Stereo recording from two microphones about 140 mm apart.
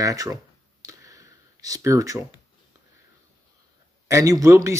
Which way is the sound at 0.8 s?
25° right (ahead or behind).